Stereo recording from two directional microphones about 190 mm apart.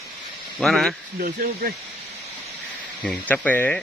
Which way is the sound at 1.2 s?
50° right (ahead or behind).